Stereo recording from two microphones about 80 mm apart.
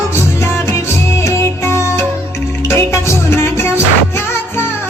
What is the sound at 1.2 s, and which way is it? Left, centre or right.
Music, left.